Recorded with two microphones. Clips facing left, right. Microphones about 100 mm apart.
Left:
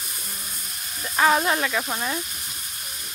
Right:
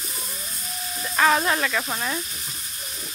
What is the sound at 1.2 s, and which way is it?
Speech, 10° left (ahead or behind).